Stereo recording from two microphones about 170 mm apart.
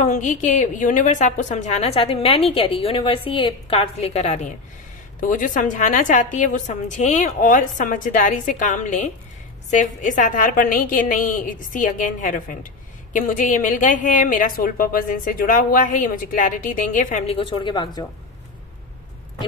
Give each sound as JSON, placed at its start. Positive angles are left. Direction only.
{"t": 0.0, "sound": "a woman's voice", "side_deg": 45}
{"t": 17.4, "sound": "speech", "side_deg": 30}